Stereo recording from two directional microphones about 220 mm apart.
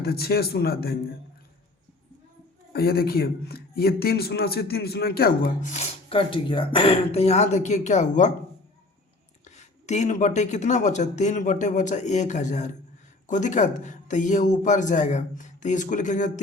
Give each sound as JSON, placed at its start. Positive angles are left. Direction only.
{"t": 0.0, "sound": "a man's voice", "side_deg": 45}
{"t": 2.7, "sound": "a man's voice", "side_deg": 45}
{"t": 5.7, "sound": "speech", "side_deg": 25}
{"t": 9.6, "sound": "speech", "side_deg": 30}